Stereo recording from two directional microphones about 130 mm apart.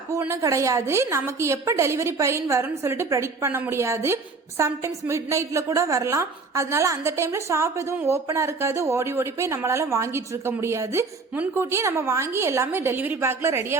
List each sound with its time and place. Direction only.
0.4 s a woman's voice: 25° right (ahead or behind)